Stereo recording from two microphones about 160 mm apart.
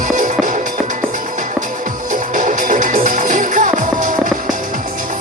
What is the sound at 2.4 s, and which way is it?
Music, 55° right (ahead or behind).